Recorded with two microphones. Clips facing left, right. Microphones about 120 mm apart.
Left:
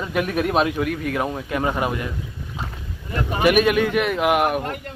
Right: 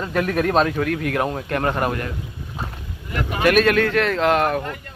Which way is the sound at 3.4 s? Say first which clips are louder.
Right 1 dB; 10° left (ahead or behind).